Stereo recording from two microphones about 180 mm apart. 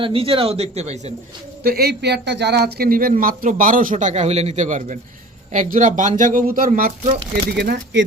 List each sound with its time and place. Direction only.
0.0 s speech: 30° right (ahead or behind)
1.6 s speech: 60° right (ahead or behind)
7.5 s speech: 70° right (ahead or behind)